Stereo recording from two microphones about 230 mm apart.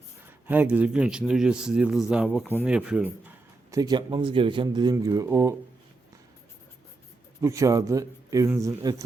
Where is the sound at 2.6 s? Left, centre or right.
Centre.